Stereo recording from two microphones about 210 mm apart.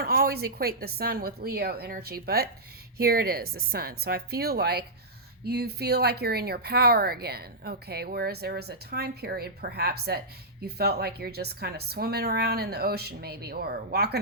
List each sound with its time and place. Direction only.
0.0 s speech: 45° right (ahead or behind)